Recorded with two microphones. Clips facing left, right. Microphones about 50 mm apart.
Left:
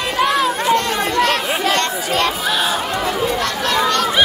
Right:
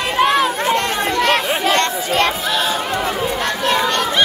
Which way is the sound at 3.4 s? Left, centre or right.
Right.